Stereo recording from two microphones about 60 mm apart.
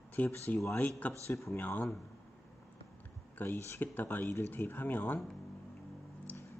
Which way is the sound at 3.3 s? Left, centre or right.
Left.